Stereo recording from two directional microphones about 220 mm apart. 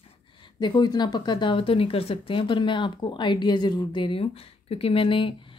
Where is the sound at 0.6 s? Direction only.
20° left (ahead or behind).